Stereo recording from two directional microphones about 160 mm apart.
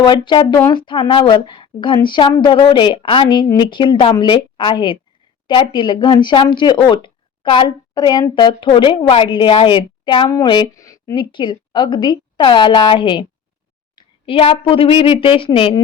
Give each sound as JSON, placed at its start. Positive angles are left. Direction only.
{"t": 0.0, "sound": "a woman's voice", "side_deg": 30}